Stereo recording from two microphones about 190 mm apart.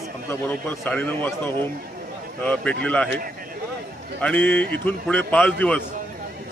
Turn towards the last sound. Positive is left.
turn(degrees=5)  # may be behind; listen again after turning